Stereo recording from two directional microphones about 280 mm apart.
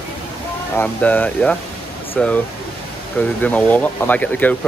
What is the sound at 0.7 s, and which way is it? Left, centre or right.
Speech, centre.